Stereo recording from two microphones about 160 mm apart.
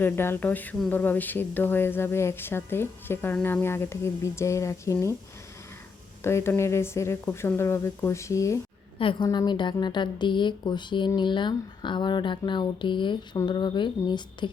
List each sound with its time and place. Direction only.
0.0 s speech: 15° left (ahead or behind)
6.2 s speech: 15° left (ahead or behind)
9.0 s a woman's voice: 30° left (ahead or behind)